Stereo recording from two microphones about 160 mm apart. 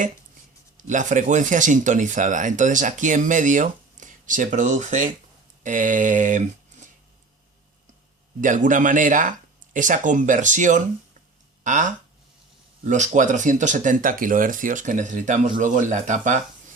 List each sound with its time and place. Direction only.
0.8 s speech: 50° right (ahead or behind)
8.4 s a man's voice: 55° right (ahead or behind)